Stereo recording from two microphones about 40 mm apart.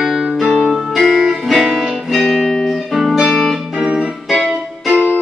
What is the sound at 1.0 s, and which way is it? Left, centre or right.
Music, centre.